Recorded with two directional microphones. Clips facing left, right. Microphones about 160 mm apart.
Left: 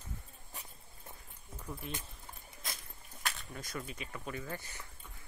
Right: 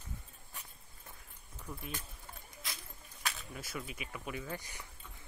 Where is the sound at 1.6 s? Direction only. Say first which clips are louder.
Left 1 dB; 5° left (ahead or behind).